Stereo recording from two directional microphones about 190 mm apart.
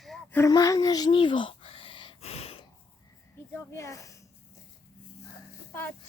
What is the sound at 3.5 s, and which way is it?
Speech, 15° left (ahead or behind).